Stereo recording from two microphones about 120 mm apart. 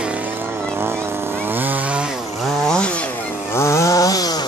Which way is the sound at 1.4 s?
15° right (ahead or behind).